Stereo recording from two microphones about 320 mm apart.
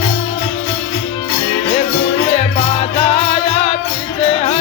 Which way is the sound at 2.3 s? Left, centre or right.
Centre.